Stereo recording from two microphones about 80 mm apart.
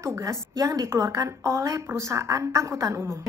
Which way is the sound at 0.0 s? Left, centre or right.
Right.